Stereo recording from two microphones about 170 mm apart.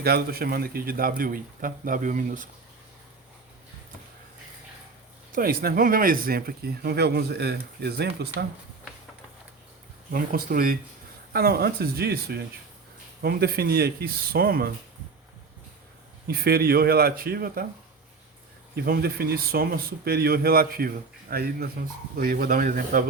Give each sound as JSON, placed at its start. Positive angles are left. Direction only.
{"t": 0.0, "sound": "speech", "side_deg": -65}
{"t": 5.3, "sound": "speech", "side_deg": -60}
{"t": 10.1, "sound": "speech", "side_deg": -60}
{"t": 16.2, "sound": "speech", "side_deg": -65}
{"t": 18.8, "sound": "speech", "side_deg": -65}